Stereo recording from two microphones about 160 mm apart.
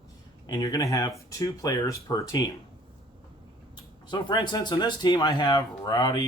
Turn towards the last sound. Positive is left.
turn(degrees=25)  # may be behind; listen again after turning